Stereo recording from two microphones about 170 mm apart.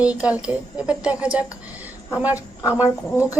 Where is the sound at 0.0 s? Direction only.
5° right (ahead or behind).